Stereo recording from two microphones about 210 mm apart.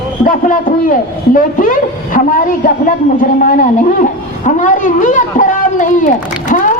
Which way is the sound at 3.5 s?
40° left (ahead or behind).